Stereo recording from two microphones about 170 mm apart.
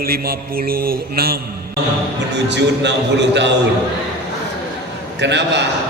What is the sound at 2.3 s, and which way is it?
A man's voice, 90° right.